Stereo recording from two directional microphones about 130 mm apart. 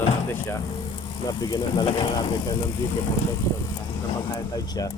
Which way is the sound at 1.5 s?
35° left (ahead or behind).